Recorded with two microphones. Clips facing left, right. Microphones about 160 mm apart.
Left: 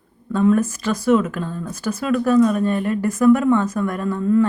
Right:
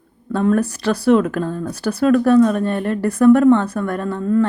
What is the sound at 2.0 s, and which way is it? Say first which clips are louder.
A woman's voice: right 3 dB; 55° right (ahead or behind).